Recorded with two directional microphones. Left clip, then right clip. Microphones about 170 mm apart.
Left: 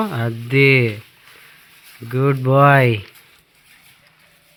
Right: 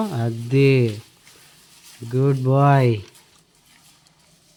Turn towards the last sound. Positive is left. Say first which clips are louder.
# left 5 dB
turn(degrees=-5)  # may be behind; listen again after turning